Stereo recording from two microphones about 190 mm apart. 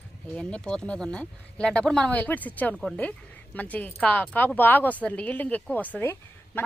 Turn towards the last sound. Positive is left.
turn(degrees=10)  # may be behind; listen again after turning